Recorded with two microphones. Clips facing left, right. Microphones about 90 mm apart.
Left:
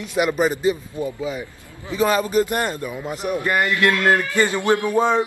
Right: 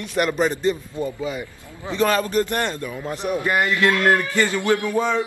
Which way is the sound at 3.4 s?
15° right (ahead or behind).